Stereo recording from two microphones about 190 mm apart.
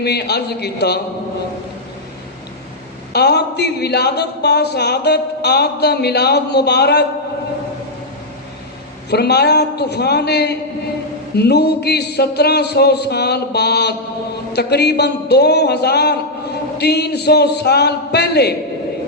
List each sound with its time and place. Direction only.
0.0 s speech: 60° left (ahead or behind)
3.1 s speech: 60° left (ahead or behind)
9.0 s speech: 60° left (ahead or behind)